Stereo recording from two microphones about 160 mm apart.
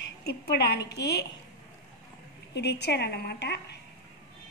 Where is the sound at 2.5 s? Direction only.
90° left.